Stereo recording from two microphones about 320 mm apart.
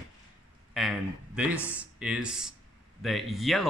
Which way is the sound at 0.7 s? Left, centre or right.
Centre.